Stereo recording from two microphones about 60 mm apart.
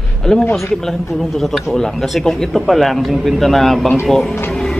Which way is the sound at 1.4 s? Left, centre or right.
Centre.